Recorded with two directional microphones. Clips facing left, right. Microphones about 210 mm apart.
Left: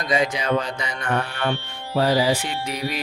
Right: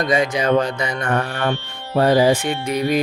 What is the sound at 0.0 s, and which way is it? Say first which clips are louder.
Music: right 4 dB; 45° right (ahead or behind).